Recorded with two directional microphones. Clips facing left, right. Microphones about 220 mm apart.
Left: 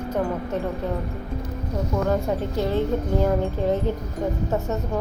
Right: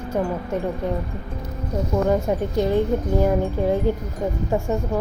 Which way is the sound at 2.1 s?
15° right (ahead or behind).